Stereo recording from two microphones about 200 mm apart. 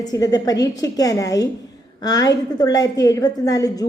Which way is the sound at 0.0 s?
20° left (ahead or behind).